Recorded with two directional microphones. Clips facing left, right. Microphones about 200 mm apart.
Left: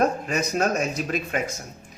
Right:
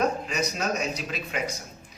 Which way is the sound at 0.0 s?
50° left (ahead or behind).